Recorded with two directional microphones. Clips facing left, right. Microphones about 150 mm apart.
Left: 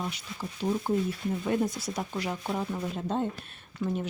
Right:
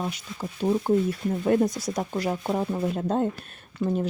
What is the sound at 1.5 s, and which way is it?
Speech, 40° right (ahead or behind).